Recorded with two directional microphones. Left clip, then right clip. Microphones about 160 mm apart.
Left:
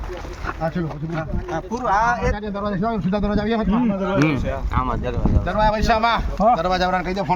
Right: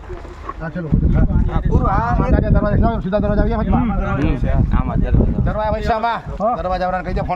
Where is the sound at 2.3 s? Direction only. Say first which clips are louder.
Right 6 dB; 20° right (ahead or behind).